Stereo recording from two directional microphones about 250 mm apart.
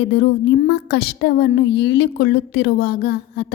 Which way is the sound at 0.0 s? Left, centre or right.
Left.